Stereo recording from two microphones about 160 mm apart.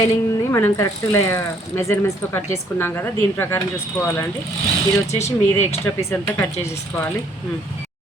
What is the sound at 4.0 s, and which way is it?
Speech, 15° left (ahead or behind).